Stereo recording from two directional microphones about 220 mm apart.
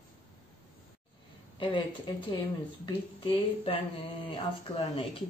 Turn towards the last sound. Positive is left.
turn(degrees=25)  # may be behind; listen again after turning